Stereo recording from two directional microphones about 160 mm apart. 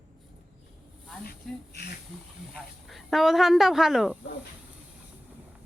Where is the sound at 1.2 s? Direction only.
80° left.